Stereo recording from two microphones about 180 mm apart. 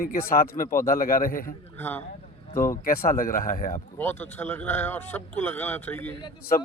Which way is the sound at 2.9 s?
55° left (ahead or behind).